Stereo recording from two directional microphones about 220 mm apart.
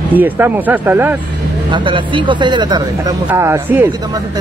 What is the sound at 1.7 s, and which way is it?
Speech, 20° right (ahead or behind).